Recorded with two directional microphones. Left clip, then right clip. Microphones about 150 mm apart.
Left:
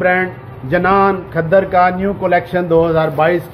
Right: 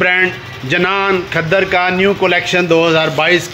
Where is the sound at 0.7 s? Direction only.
40° right (ahead or behind).